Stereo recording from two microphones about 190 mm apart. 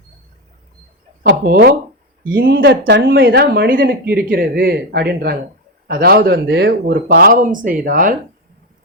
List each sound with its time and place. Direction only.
1.3 s speech: 55° right (ahead or behind)